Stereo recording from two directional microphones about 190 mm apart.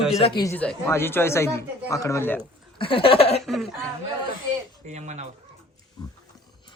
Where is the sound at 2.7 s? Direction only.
25° left (ahead or behind).